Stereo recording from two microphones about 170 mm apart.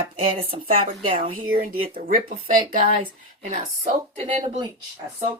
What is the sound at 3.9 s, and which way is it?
Speech, 30° right (ahead or behind).